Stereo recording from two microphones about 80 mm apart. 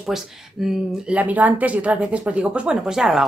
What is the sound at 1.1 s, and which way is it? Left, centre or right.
Speech, centre.